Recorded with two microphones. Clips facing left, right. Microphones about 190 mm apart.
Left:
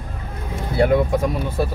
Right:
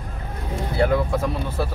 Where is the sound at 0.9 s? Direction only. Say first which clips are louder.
Left 4 dB; 15° left (ahead or behind).